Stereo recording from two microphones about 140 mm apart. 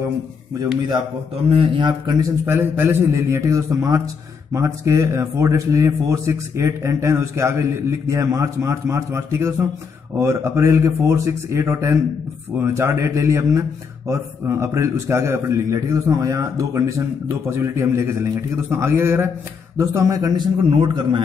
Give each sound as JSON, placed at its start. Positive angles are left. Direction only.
{"t": 1.5, "sound": "a man's voice", "side_deg": -35}
{"t": 2.4, "sound": "a man's voice", "side_deg": -15}